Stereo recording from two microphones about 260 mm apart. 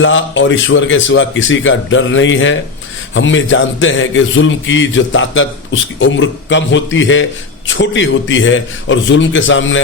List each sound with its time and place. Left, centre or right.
0.0 s a man's voice: left